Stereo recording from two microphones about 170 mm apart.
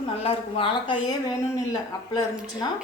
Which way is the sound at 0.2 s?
35° left (ahead or behind).